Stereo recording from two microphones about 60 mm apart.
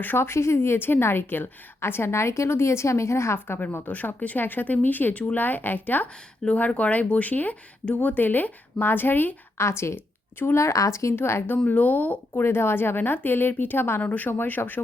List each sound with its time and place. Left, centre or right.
0.0 s a woman's voice: left
0.3 s a woman's voice: left
3.8 s speech: left
9.6 s speech: left
10.5 s speech: left
11.1 s a woman's voice: left
11.4 s speech: left
12.4 s a woman's voice: left
14.0 s a woman's voice: left